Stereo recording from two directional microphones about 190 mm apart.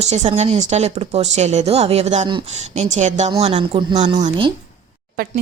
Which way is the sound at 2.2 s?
25° right (ahead or behind).